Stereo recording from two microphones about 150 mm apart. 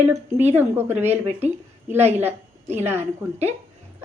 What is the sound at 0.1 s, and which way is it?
A woman's voice, 15° right (ahead or behind).